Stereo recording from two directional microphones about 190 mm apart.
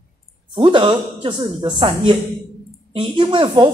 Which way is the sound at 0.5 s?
25° right (ahead or behind).